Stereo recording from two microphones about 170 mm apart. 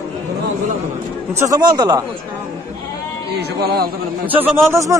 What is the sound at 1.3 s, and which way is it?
Speech, 20° right (ahead or behind).